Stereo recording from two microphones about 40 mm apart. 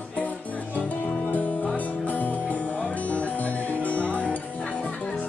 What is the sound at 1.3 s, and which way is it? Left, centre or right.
Music, left.